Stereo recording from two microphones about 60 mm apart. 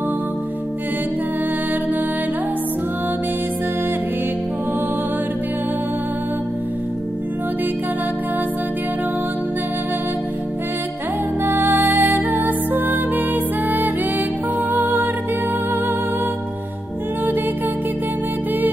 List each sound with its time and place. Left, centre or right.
11.4 s music: right